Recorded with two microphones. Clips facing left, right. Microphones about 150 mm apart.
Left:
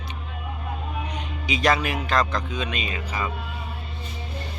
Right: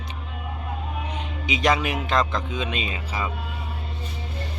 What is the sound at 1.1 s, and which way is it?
Speech, 25° right (ahead or behind).